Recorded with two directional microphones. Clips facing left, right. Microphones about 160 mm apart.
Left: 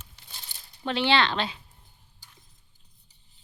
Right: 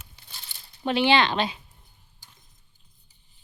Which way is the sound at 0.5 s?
45° left (ahead or behind).